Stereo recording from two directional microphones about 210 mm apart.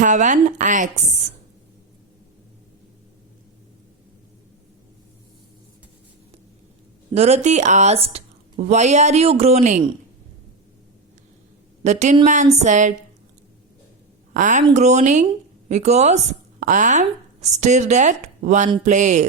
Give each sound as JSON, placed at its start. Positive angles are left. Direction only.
{"t": 0.0, "sound": "speech", "side_deg": -35}
{"t": 7.1, "sound": "speech", "side_deg": -30}
{"t": 11.8, "sound": "speech", "side_deg": -35}
{"t": 14.3, "sound": "speech", "side_deg": -35}